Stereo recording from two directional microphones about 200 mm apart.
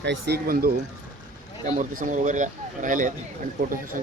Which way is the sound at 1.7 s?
40° right (ahead or behind).